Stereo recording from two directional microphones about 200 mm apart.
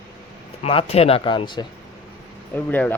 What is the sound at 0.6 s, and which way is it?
Speech, 30° left (ahead or behind).